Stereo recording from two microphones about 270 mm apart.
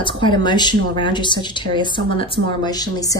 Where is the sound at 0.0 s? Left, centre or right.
Centre.